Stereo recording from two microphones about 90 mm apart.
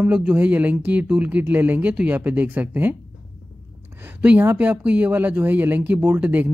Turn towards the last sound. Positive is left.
turn(degrees=-20)  # may be behind; listen again after turning